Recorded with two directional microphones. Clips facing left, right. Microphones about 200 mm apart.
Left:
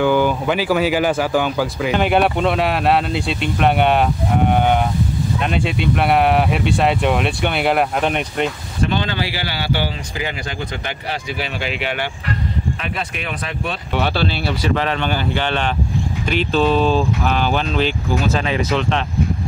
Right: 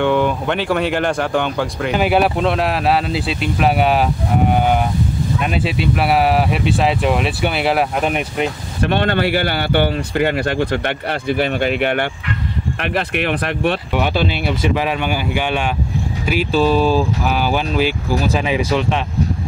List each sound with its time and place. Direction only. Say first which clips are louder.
0.0 s speech: even; centre (ahead or behind)
8.8 s speech: right 4 dB; 60° right (ahead or behind)
12.8 s speech: right 7 dB; 70° right (ahead or behind)
13.9 s speech: right 2 dB; 15° right (ahead or behind)